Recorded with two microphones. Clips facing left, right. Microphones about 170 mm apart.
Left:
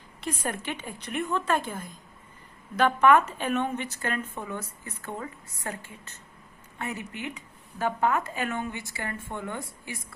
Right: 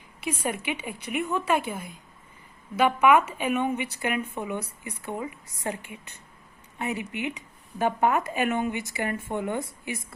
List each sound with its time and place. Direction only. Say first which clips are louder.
0.2 s a woman's voice: right 2 dB; 10° right (ahead or behind)